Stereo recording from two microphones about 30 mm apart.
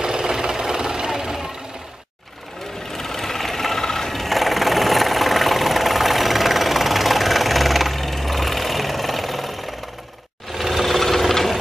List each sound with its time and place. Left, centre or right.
0.0 s jackhammer: right
2.9 s sewing machine: centre
4.1 s engine: centre
10.5 s sewing machine: centre
10.9 s wood: centre